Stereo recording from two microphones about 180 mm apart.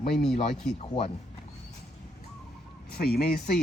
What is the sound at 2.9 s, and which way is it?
Speech, 60° left (ahead or behind).